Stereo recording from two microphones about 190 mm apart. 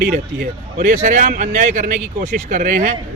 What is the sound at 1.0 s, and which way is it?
Speech, 40° right (ahead or behind).